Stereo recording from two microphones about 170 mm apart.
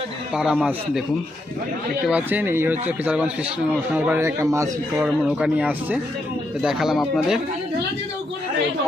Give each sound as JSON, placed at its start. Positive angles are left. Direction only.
{"t": 0.3, "sound": "speech", "side_deg": -5}
{"t": 2.0, "sound": "speech", "side_deg": -10}
{"t": 4.9, "sound": "speech", "side_deg": -5}